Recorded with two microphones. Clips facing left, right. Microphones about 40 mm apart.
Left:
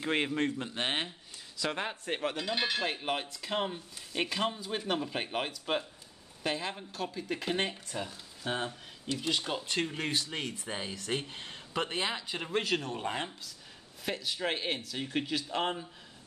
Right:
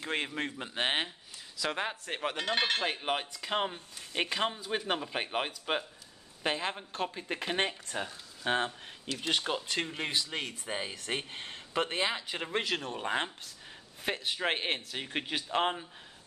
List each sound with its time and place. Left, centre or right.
0.0 s speech: centre
0.4 s speech: centre
2.3 s speech: right
2.8 s speech: centre
6.4 s speech: right
9.9 s speech: centre